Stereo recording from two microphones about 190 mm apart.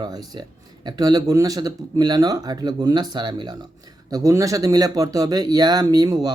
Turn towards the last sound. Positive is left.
turn(degrees=-20)  # may be behind; listen again after turning